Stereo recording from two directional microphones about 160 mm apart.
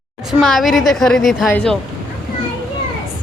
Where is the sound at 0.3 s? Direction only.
Centre (ahead or behind).